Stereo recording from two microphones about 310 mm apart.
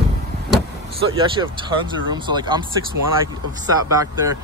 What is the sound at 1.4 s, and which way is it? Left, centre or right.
Speech, centre.